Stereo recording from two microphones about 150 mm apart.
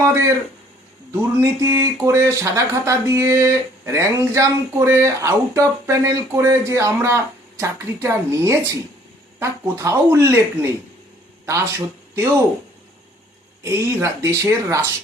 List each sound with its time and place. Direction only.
0.0 s speech: 20° right (ahead or behind)
12.1 s speech: 20° right (ahead or behind)
13.7 s speech: 20° right (ahead or behind)